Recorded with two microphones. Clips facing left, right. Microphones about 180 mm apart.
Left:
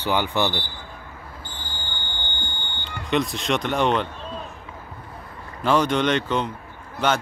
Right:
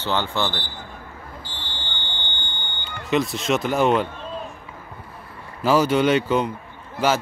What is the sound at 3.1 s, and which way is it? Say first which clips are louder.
Speech: right 2 dB; centre (ahead or behind).